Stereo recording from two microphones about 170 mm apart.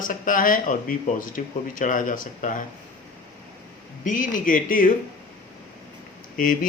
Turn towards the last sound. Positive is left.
turn(degrees=50)  # may be behind; listen again after turning